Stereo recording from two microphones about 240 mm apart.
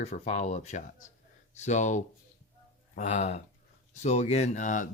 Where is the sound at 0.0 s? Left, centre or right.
Left.